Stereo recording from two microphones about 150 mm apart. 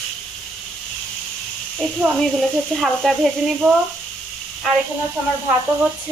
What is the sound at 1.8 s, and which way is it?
Speech, 5° right (ahead or behind).